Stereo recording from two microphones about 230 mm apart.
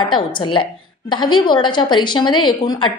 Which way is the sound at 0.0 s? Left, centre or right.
Centre.